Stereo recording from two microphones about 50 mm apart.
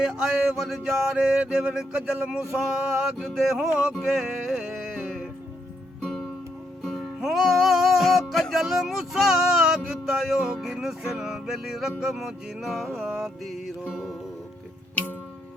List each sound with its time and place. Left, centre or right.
0.0 s music: centre
2.1 s a sound: right
2.4 s music: centre
6.0 s music: centre
6.8 s music: centre